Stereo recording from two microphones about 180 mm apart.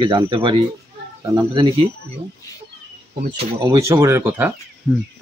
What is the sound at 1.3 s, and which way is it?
Speech, 15° right (ahead or behind).